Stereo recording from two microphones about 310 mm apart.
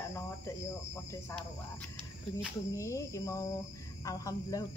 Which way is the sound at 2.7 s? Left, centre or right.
Centre.